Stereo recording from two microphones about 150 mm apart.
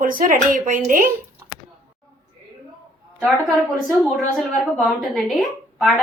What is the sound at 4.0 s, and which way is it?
Speech, centre (ahead or behind).